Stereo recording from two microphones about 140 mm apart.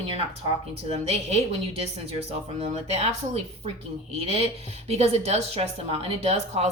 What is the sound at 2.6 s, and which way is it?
A woman's voice, 45° right (ahead or behind).